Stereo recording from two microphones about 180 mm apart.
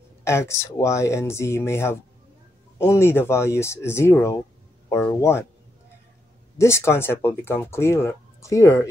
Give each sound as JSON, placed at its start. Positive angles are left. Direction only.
{"t": 0.2, "sound": "speech", "side_deg": 15}
{"t": 6.6, "sound": "speech", "side_deg": 15}